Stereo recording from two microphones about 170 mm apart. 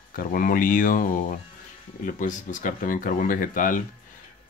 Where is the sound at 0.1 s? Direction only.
55° left (ahead or behind).